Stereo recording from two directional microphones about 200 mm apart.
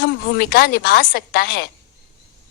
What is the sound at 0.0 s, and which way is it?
A woman's voice, 50° left (ahead or behind).